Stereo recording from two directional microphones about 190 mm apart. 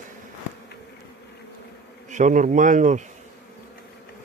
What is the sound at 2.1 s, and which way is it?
Speech, 40° right (ahead or behind).